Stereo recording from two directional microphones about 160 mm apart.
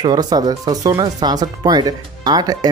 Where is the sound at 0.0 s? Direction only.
25° right (ahead or behind).